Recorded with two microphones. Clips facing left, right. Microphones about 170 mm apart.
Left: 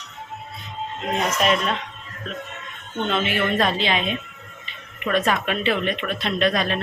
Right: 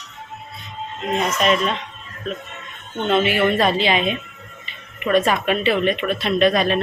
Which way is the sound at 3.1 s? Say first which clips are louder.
Right 6 dB; 10° right (ahead or behind).